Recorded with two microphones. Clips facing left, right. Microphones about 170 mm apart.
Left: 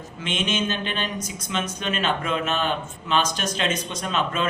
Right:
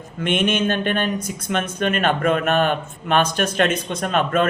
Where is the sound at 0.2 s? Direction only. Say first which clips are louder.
Right 6 dB; 55° right (ahead or behind).